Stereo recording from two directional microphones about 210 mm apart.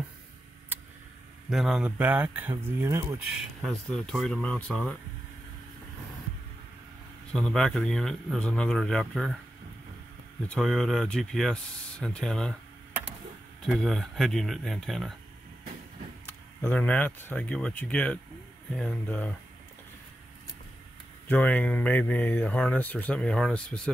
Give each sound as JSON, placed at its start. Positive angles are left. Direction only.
{"t": 1.5, "sound": "speech", "side_deg": 0}
{"t": 3.3, "sound": "speech", "side_deg": 0}
{"t": 7.3, "sound": "speech", "side_deg": 5}
{"t": 10.5, "sound": "speech", "side_deg": 0}
{"t": 13.7, "sound": "speech", "side_deg": 0}
{"t": 16.3, "sound": "speech", "side_deg": 10}
{"t": 21.3, "sound": "speech", "side_deg": 5}